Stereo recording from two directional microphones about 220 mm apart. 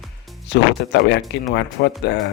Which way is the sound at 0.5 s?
50° left (ahead or behind).